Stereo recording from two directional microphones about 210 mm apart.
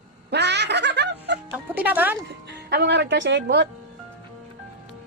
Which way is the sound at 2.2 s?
50° right (ahead or behind).